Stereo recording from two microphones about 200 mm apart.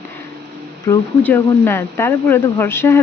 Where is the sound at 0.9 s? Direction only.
10° left (ahead or behind).